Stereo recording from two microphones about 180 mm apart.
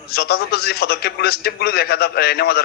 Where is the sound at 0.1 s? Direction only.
60° left (ahead or behind).